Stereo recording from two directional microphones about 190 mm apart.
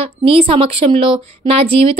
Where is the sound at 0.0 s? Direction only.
30° right (ahead or behind).